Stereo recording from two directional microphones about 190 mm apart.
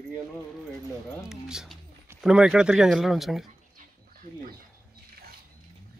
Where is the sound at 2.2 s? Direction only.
5° right (ahead or behind).